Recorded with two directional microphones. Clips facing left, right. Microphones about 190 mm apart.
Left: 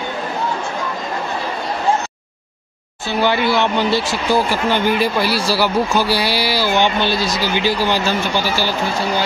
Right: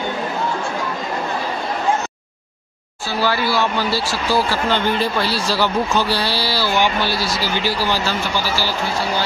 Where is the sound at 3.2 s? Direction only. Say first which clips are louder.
Left 3 dB; 20° left (ahead or behind).